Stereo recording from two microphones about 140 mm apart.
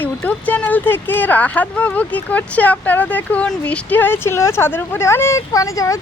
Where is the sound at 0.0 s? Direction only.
10° left (ahead or behind).